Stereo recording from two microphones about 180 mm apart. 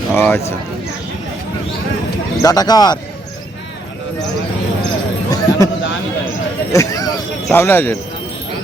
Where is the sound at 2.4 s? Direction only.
20° left (ahead or behind).